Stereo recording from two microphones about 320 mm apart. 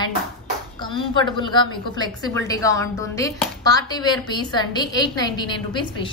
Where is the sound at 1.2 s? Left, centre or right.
Centre.